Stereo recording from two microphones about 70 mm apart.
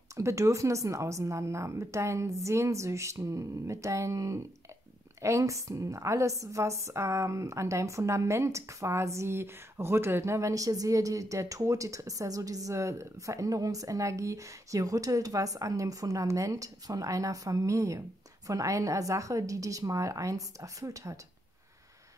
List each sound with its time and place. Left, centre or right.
0.1 s a woman's voice: right